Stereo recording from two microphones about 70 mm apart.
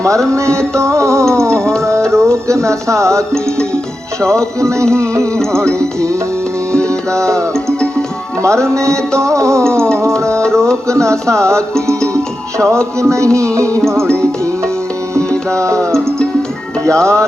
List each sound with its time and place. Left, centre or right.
0.3 s music: right
5.2 s music: centre
8.4 s music: right
10.3 s music: centre
11.0 s music: right
15.3 s music: centre
15.6 s music: right